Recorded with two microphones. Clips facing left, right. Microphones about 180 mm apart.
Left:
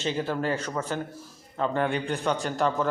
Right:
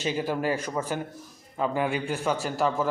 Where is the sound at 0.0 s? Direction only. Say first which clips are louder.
Right 1 dB; 10° right (ahead or behind).